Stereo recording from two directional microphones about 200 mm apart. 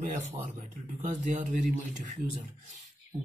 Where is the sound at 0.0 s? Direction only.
35° right (ahead or behind).